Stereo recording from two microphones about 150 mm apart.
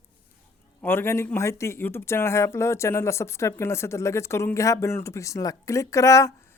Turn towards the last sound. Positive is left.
turn(degrees=20)  # may be behind; listen again after turning